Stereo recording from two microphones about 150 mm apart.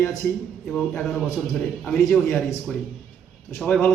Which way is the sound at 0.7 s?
5° left (ahead or behind).